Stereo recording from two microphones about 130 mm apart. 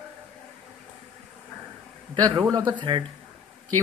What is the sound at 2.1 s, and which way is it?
Speech, 30° right (ahead or behind).